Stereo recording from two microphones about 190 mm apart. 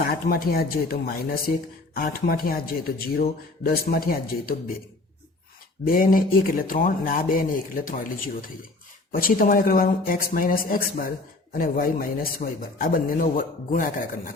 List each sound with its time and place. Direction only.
0.0 s speech: 50° left (ahead or behind)
5.8 s speech: 50° left (ahead or behind)